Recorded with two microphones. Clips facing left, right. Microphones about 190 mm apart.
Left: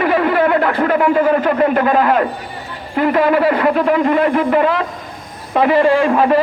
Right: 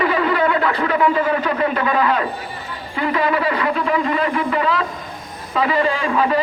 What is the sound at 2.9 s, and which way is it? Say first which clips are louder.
Speech: left 6 dB; 50° left (ahead or behind).